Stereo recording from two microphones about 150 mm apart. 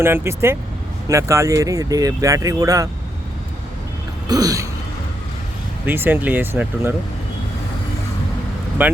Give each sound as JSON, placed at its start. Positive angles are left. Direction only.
{"t": 0.0, "sound": "speech", "side_deg": -15}
{"t": 4.3, "sound": "speech", "side_deg": -25}
{"t": 5.8, "sound": "speech", "side_deg": -15}
{"t": 8.8, "sound": "speech", "side_deg": -10}